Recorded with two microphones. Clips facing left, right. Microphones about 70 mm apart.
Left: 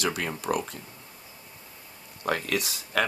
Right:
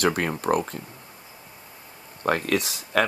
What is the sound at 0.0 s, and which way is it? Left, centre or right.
Speech, right.